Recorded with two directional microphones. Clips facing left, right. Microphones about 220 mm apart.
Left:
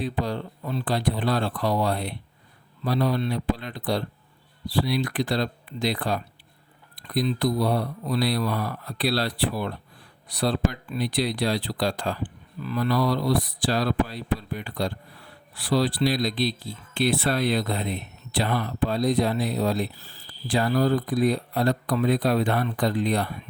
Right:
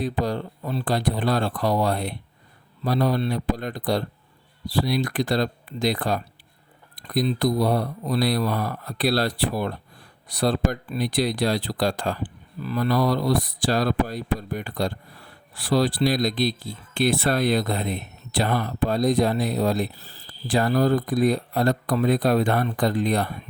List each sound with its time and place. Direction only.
0.0 s speech: 45° right (ahead or behind)